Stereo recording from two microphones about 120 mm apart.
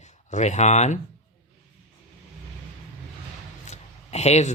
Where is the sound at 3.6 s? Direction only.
65° left (ahead or behind).